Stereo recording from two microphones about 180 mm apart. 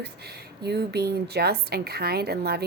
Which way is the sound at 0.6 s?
65° right (ahead or behind).